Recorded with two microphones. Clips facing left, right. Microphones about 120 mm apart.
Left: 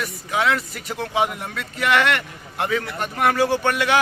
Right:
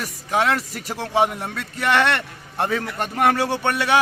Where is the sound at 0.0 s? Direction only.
40° right (ahead or behind).